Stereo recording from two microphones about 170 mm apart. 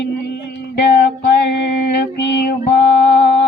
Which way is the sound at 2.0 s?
80° left.